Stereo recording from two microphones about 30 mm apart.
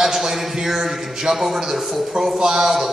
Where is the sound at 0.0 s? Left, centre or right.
Centre.